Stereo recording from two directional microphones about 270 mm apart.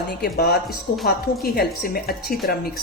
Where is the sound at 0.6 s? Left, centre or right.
Centre.